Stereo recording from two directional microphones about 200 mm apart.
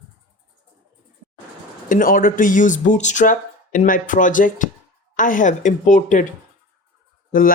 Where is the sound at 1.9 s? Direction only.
45° left (ahead or behind).